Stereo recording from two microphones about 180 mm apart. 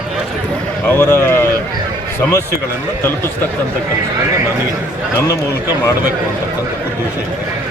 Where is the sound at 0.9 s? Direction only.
10° left (ahead or behind).